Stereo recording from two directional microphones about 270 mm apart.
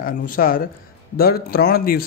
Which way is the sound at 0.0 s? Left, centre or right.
Left.